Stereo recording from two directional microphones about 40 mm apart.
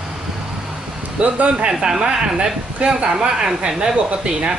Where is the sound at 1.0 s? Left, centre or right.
Right.